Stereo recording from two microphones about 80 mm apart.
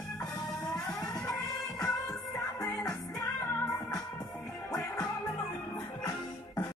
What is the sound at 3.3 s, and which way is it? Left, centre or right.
Music, left.